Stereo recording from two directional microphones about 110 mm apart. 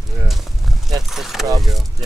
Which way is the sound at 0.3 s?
Centre (ahead or behind).